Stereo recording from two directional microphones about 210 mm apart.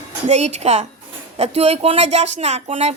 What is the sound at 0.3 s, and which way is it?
Speech, 30° right (ahead or behind).